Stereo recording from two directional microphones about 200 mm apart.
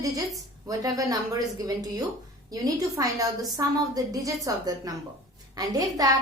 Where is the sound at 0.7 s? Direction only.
15° right (ahead or behind).